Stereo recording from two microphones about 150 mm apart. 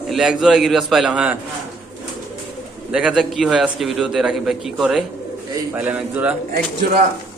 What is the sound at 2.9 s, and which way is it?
A man's voice, 5° right (ahead or behind).